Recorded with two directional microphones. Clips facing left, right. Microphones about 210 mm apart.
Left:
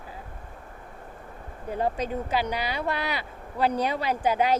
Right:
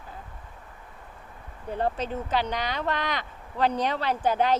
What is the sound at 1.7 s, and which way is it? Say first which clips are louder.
Speech: left 1 dB; 10° left (ahead or behind).